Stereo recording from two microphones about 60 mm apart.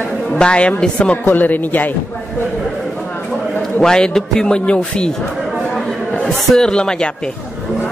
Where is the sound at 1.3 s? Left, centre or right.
Left.